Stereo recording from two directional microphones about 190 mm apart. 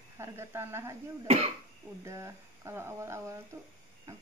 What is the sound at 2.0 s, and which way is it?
Speech, 15° right (ahead or behind).